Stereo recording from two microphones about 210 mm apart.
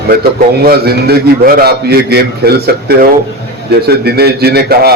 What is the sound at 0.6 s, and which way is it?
A man's voice, 50° right (ahead or behind).